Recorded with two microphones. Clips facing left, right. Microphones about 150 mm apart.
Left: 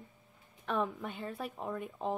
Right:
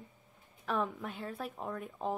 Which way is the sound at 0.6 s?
Centre (ahead or behind).